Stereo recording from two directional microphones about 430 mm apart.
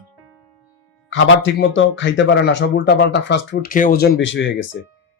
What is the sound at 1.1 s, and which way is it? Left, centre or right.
Speech, left.